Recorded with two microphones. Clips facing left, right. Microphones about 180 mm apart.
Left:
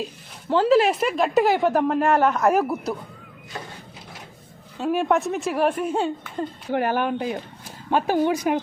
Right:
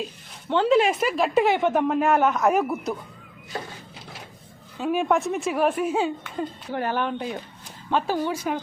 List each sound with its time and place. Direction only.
0.5 s speech: centre (ahead or behind)
4.8 s speech: centre (ahead or behind)
6.7 s speech: 15° left (ahead or behind)